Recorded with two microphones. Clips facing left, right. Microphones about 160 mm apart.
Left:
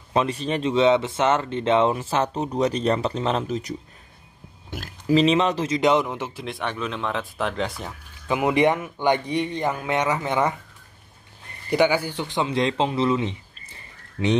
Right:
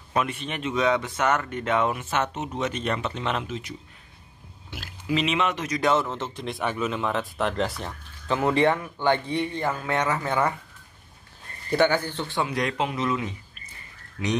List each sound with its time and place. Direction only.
0.1 s speech: 30° left (ahead or behind); by 6.4 s 10° left (ahead or behind)
6.4 s speech: centre (ahead or behind)
8.3 s speech: 15° left (ahead or behind)
11.7 s speech: 10° left (ahead or behind); by 14.3 s 30° left (ahead or behind)